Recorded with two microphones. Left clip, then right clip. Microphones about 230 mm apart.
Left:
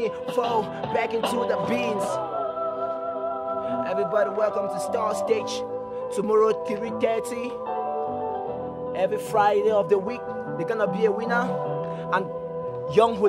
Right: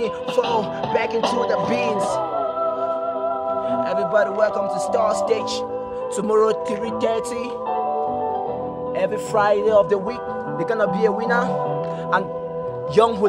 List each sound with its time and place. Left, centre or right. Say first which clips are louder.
0.6 s speech: right 4 dB; centre
1.2 s music: right 4 dB; right
4.1 s music: right 5 dB; centre
7.7 s music: right 6 dB; right
9.0 s speech: right 2 dB; centre
10.7 s music: right 4 dB; centre
13.0 s speech: right 3 dB; centre